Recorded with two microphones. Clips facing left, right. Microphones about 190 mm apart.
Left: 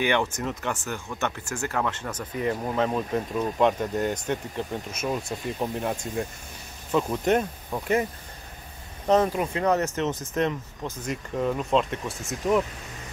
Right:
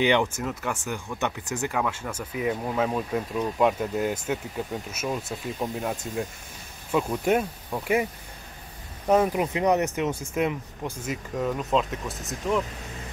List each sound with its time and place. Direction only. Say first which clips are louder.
0.0 s speech: right 2 dB; 15° right (ahead or behind)
0.4 s speech: even; 5° right (ahead or behind)